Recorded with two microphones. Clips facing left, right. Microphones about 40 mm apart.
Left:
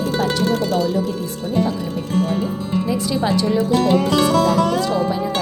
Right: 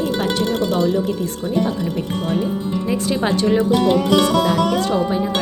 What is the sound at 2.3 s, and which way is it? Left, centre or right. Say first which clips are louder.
Speech: right 1 dB; right.